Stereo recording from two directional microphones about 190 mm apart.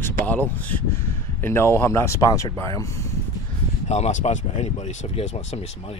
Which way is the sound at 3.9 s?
40° left (ahead or behind).